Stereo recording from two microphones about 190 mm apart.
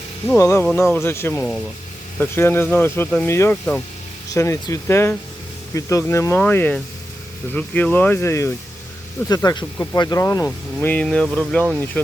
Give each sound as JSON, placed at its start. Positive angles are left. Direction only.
{"t": 0.3, "sound": "speech", "side_deg": 15}